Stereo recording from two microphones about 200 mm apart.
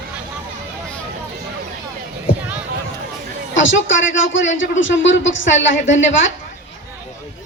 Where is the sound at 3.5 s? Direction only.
70° left (ahead or behind).